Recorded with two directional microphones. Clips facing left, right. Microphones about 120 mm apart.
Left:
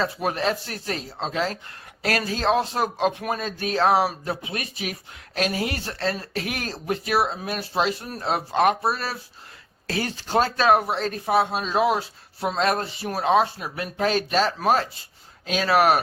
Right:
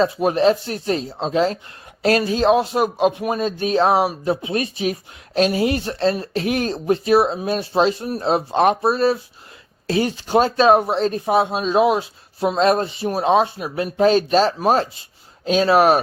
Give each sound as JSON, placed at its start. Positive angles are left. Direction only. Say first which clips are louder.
{"t": 0.0, "sound": "speech", "louder": "right 8 dB", "side_deg": -20}